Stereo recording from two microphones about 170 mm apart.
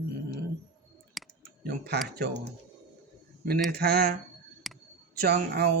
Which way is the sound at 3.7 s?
70° right (ahead or behind).